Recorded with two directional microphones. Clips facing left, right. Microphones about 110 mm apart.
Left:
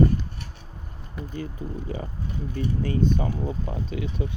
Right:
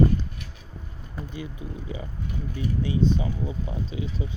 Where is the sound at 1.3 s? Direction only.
45° left (ahead or behind).